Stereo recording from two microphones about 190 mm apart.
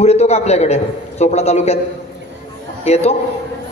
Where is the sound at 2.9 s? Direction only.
35° left (ahead or behind).